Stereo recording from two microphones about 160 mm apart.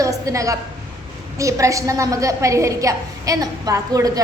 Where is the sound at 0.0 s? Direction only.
20° right (ahead or behind).